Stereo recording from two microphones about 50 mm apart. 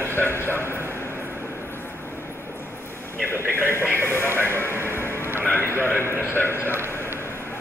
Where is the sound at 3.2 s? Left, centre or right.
Left.